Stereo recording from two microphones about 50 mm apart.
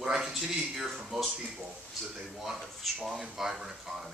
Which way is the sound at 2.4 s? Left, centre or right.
Centre.